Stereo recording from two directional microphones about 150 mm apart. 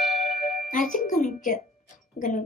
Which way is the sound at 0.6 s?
60° left (ahead or behind).